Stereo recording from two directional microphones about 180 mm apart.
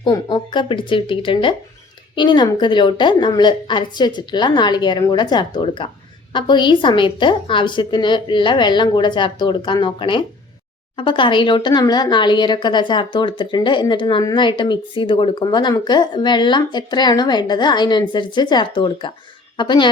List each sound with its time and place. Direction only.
0.0 s speech: 25° left (ahead or behind)